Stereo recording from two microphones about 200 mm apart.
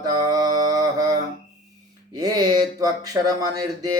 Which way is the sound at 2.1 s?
20° right (ahead or behind).